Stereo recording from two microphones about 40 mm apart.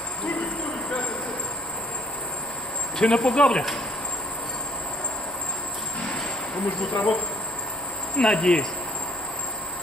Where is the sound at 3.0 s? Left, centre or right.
Left.